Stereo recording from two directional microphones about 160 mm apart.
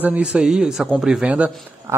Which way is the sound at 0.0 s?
10° right (ahead or behind).